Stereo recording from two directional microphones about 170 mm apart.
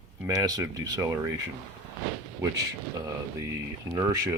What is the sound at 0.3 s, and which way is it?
Speech, 20° right (ahead or behind).